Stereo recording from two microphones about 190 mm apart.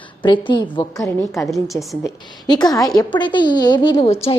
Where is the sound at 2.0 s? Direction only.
20° left (ahead or behind).